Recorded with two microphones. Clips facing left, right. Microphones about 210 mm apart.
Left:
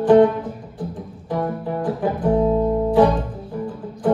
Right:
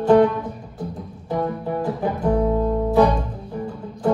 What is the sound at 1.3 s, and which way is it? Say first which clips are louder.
Music: even; 5° left (ahead or behind).